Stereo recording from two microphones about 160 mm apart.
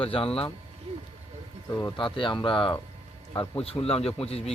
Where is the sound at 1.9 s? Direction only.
30° left (ahead or behind).